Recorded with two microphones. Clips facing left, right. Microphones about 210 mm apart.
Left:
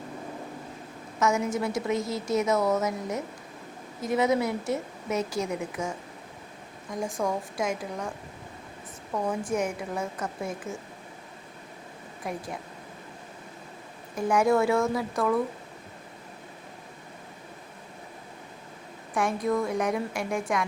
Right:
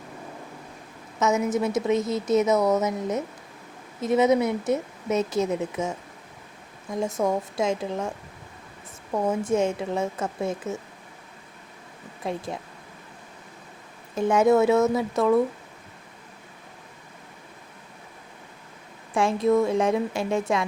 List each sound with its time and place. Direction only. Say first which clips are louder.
1.2 s a woman's voice: right 3 dB; 20° right (ahead or behind)
9.1 s a woman's voice: right 5 dB; 25° right (ahead or behind)
12.2 s a woman's voice: right 4 dB; 25° right (ahead or behind)
14.2 s a woman's voice: right 4 dB; 25° right (ahead or behind)
19.1 s a woman's voice: right 5 dB; 25° right (ahead or behind)